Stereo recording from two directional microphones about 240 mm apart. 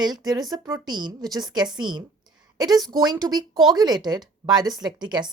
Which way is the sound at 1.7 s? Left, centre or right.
Centre.